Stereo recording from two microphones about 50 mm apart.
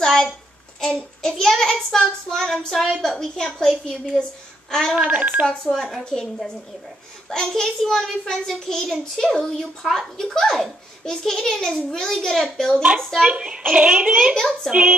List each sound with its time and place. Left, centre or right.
0.0 s a sound: centre
0.7 s child singing: centre
1.3 s a child's voice: centre
4.9 s a child's voice: right
6.0 s a child's voice: centre
13.3 s a child's voice: right
14.3 s a child's voice: centre
14.7 s a child's voice: centre